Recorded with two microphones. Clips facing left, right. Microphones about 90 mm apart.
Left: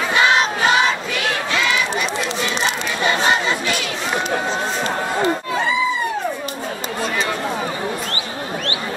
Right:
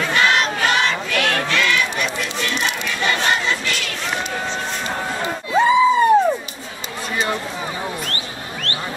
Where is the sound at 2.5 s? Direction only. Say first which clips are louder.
Left 2 dB; 30° left (ahead or behind).